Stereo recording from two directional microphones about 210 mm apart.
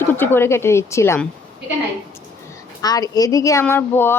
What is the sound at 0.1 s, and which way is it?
Speech, 10° left (ahead or behind).